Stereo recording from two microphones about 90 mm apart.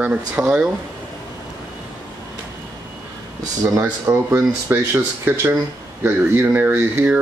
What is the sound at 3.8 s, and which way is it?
Speech, 25° right (ahead or behind).